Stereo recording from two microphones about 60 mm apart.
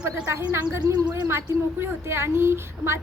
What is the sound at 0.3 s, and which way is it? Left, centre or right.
A woman's voice, right.